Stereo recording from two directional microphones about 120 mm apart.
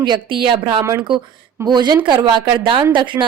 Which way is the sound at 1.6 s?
35° right (ahead or behind).